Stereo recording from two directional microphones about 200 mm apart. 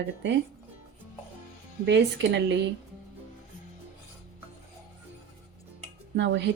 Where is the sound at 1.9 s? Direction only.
60° right (ahead or behind).